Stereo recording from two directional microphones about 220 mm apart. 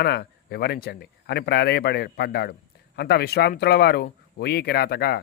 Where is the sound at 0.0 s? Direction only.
45° left (ahead or behind).